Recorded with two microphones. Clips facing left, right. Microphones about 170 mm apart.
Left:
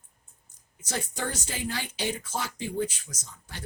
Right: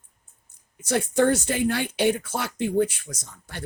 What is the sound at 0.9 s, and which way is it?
Speech, 60° right (ahead or behind).